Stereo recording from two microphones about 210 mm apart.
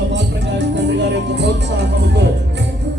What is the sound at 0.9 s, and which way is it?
Music, 55° right (ahead or behind).